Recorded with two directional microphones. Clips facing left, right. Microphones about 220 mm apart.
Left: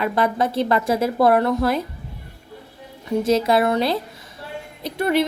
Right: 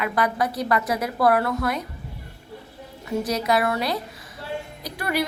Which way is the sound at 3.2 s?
25° left (ahead or behind).